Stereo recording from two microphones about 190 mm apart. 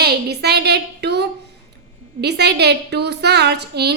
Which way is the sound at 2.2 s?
60° right (ahead or behind).